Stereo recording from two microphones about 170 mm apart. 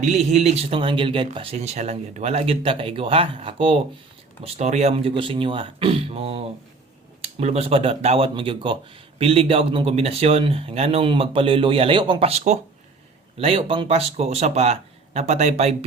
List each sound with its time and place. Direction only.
0.0 s speech: 40° right (ahead or behind)